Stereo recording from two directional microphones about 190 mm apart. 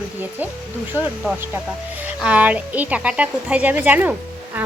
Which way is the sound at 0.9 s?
10° left (ahead or behind).